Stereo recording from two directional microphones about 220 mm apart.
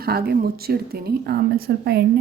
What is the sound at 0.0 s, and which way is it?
A woman's voice, 45° right (ahead or behind).